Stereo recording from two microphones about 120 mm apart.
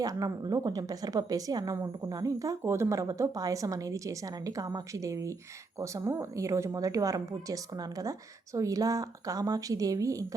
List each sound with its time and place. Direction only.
0.0 s a woman's voice: 30° right (ahead or behind)